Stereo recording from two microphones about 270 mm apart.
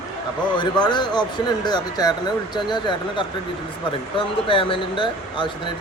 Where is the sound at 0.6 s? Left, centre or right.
Centre.